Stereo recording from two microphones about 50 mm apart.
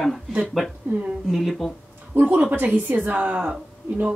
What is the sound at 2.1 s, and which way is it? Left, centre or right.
Speech, right.